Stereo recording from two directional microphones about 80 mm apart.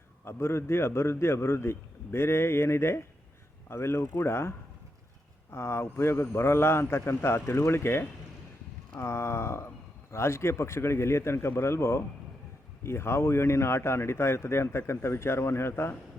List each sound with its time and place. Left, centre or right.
0.3 s speech: left